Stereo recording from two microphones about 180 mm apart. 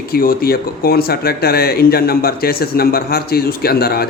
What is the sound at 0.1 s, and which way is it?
Speech, 55° left (ahead or behind).